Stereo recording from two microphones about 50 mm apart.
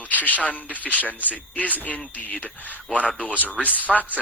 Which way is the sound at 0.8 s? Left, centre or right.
Left.